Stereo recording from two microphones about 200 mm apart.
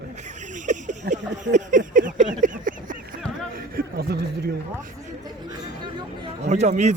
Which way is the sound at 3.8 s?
50° right (ahead or behind).